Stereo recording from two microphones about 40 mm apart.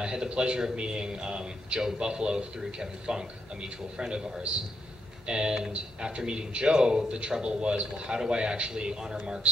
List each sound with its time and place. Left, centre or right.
0.0 s speech: right